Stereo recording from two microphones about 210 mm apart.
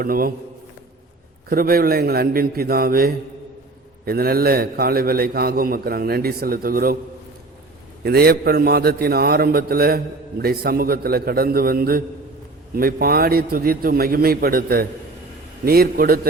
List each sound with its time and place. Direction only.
0.0 s a man's voice: 45° right (ahead or behind)
1.5 s a man's voice: 45° right (ahead or behind)
8.0 s a man's voice: 50° right (ahead or behind)